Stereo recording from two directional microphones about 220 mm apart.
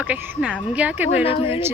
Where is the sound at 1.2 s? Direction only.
25° left (ahead or behind).